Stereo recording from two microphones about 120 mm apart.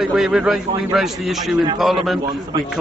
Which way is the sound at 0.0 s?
5° right (ahead or behind).